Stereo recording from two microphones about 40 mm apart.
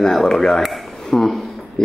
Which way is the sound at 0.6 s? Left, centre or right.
Centre.